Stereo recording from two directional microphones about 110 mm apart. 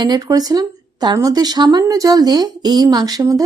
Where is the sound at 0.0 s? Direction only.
35° right (ahead or behind).